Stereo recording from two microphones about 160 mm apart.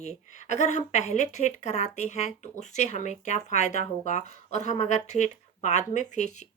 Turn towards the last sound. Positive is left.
turn(degrees=45)  # may be behind; listen again after turning